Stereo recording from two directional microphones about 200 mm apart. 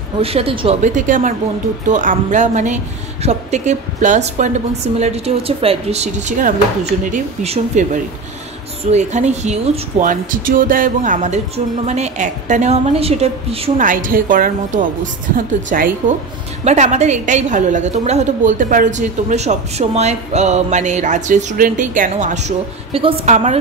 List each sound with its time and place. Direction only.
0.2 s speech: 30° right (ahead or behind)
13.8 s a woman's voice: 45° right (ahead or behind)